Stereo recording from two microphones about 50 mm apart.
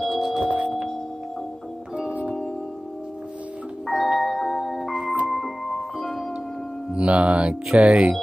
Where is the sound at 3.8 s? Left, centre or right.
Centre.